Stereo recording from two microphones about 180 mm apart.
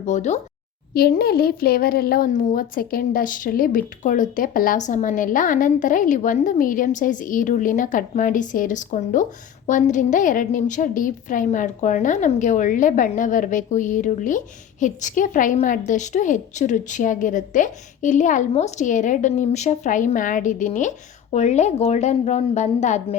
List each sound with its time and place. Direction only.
0.0 s speech: 40° left (ahead or behind)
0.9 s speech: 55° left (ahead or behind); by 23.0 s 40° left (ahead or behind)